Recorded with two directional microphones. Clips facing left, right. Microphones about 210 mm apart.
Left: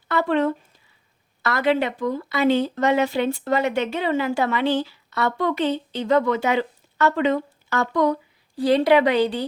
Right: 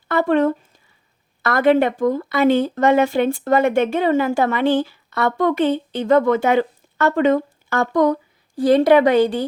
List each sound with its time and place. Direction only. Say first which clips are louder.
0.1 s speech: right 4 dB; 50° right (ahead or behind)